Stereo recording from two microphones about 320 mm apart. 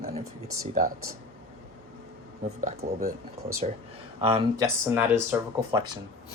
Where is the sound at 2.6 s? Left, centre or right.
Right.